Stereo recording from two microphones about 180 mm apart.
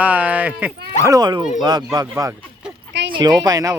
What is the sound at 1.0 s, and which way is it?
Speech, 20° right (ahead or behind).